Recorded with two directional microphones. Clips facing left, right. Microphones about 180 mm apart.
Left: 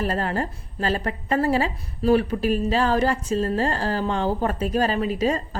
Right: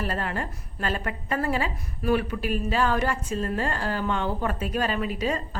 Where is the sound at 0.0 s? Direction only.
35° left (ahead or behind).